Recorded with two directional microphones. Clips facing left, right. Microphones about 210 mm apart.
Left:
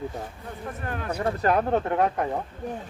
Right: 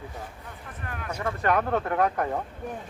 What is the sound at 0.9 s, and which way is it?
Speech, 35° left (ahead or behind).